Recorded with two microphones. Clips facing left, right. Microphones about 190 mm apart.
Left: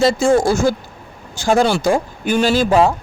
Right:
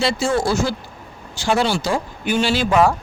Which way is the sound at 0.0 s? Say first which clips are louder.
Left 6 dB; 45° left (ahead or behind).